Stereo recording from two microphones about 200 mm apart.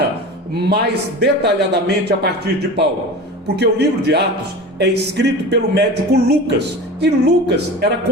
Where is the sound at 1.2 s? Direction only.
55° right (ahead or behind).